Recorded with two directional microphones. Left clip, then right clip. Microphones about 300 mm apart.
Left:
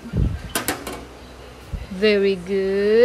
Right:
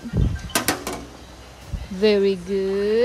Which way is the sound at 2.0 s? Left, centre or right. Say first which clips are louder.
Even; centre.